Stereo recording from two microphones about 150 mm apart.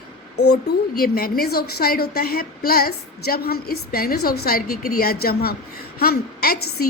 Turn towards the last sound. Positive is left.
turn(degrees=90)